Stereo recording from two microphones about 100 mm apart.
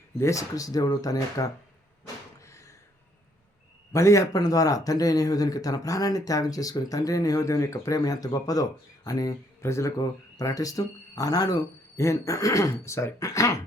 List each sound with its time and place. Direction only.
0.2 s speech: 30° left (ahead or behind)
2.4 s a sound: 30° left (ahead or behind)
3.9 s speech: 30° left (ahead or behind)